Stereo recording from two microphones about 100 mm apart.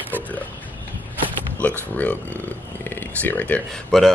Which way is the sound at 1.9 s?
15° left (ahead or behind).